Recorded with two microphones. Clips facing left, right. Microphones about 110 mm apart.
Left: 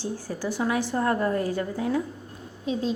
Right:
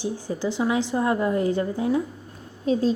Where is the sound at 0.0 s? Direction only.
20° right (ahead or behind).